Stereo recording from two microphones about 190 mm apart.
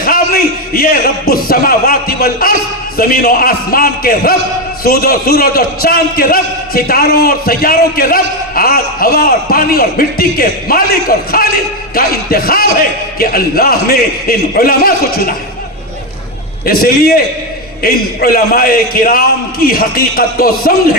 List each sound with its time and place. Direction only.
0.0 s a man's voice: 50° left (ahead or behind)
11.9 s a man's voice: 55° left (ahead or behind)
16.6 s a man's voice: 55° left (ahead or behind)